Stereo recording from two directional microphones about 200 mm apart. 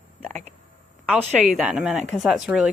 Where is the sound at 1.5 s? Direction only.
5° right (ahead or behind).